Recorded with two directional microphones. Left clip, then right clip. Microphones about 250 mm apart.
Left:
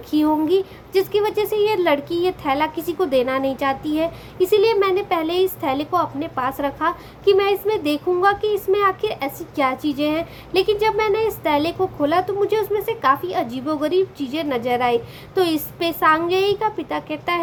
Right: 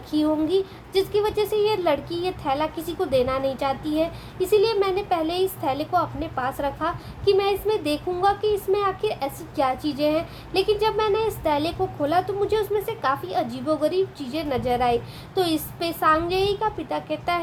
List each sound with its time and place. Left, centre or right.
0.2 s speech: centre